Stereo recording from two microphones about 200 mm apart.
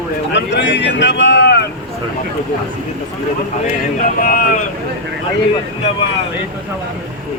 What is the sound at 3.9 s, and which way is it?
Speech, 40° left (ahead or behind).